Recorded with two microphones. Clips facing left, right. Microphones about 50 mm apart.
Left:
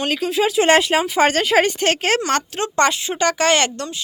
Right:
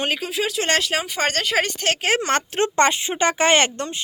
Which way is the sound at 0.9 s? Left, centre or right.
Centre.